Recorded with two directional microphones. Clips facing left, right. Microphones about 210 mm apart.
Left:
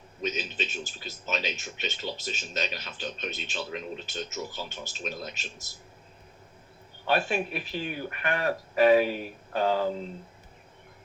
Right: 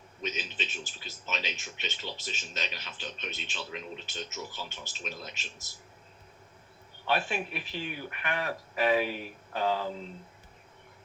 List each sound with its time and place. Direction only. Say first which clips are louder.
0.2 s a man's voice: left 5 dB; 40° left (ahead or behind)
7.1 s speech: left 4 dB; 40° left (ahead or behind)